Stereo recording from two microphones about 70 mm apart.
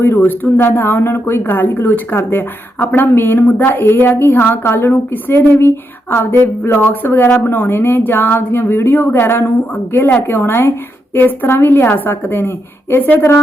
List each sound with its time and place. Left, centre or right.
0.0 s a woman's voice: left